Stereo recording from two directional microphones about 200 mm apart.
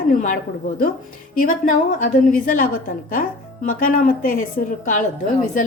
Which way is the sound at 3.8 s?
45° left (ahead or behind).